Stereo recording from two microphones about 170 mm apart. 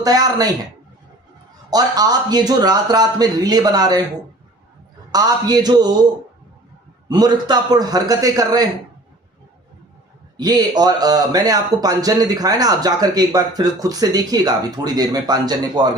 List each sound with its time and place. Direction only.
0.0 s speech: 20° right (ahead or behind)
1.7 s speech: 25° right (ahead or behind)
5.1 s speech: 25° right (ahead or behind)
7.1 s speech: 25° right (ahead or behind)
10.3 s speech: 25° right (ahead or behind)